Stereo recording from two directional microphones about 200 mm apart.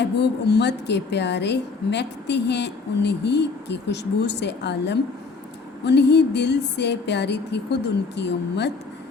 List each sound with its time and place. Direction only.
0.0 s a woman's voice: 55° left (ahead or behind)